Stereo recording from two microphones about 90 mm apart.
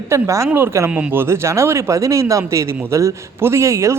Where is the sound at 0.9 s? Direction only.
15° right (ahead or behind).